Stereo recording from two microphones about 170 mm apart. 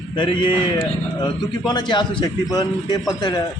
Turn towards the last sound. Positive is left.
turn(degrees=20)  # may be behind; listen again after turning